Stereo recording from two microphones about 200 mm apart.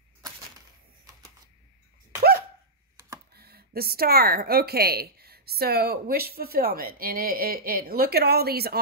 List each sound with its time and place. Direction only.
3.3 s speech: 50° right (ahead or behind)